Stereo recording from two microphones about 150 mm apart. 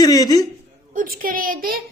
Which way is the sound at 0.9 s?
60° right (ahead or behind).